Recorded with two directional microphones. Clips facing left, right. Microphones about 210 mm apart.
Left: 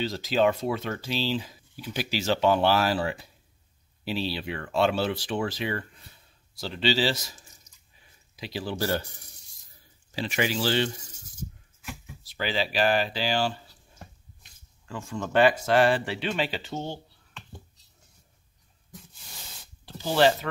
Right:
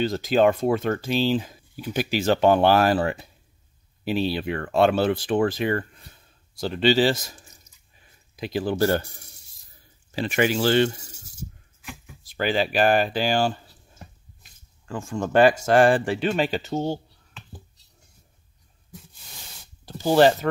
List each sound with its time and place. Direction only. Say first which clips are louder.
0.0 s speech: right 5 dB; 50° right (ahead or behind)
10.1 s speech: right 5 dB; 55° right (ahead or behind)
12.2 s speech: right 6 dB; 50° right (ahead or behind)
14.9 s speech: right 5 dB; 50° right (ahead or behind)
19.8 s a sound: right 5 dB; 45° right (ahead or behind)